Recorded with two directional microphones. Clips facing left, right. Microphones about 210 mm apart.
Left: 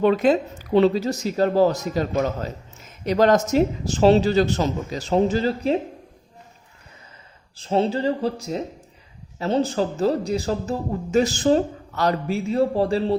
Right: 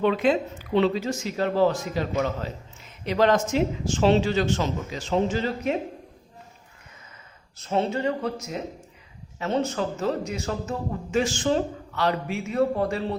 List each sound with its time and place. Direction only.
0.0 s speech: 40° left (ahead or behind)
7.5 s speech: 30° left (ahead or behind)